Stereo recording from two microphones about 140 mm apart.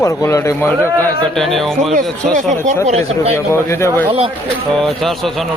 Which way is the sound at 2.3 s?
60° right (ahead or behind).